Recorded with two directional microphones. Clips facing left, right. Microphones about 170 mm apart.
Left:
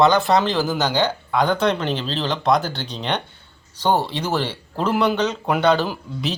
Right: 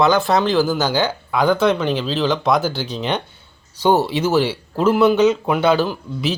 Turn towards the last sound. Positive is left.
turn(degrees=-5)  # may be behind; listen again after turning